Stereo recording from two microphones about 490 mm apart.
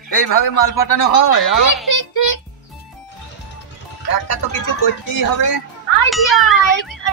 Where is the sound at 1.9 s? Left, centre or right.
Left.